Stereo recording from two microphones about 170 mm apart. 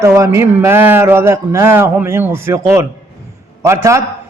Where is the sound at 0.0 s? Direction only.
15° right (ahead or behind).